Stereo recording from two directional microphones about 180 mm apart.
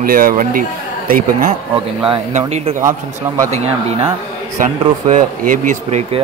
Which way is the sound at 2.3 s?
40° right (ahead or behind).